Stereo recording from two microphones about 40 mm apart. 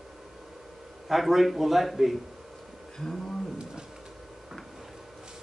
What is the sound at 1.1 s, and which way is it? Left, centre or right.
A man's voice, centre.